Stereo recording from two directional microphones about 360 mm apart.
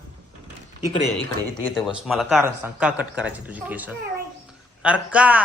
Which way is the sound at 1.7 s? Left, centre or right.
Centre.